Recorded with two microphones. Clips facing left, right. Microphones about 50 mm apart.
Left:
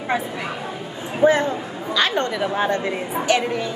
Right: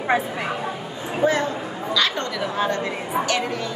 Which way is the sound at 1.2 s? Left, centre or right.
Left.